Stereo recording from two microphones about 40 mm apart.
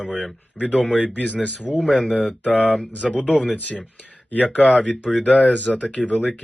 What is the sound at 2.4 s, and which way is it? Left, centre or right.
Speech, left.